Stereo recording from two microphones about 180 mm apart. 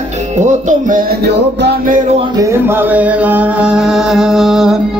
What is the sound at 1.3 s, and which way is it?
Music, 70° right (ahead or behind).